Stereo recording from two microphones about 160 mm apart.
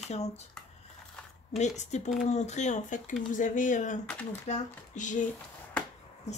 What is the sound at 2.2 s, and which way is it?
Speech, 45° left (ahead or behind).